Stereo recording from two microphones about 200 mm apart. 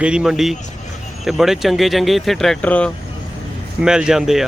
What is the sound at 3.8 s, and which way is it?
Speech, 5° right (ahead or behind).